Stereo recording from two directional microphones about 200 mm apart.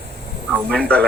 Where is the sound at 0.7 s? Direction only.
5° left (ahead or behind).